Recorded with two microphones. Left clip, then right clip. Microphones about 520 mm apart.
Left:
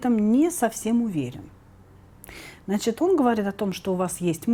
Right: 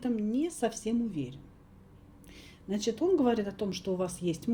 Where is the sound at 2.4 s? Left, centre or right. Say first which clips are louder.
Left 7 dB; left.